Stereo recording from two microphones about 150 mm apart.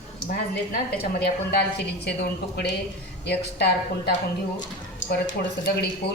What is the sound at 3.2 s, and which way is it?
Speech, 90° left.